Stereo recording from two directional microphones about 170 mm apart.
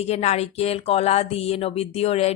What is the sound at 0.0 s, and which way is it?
A woman's voice, 40° left (ahead or behind).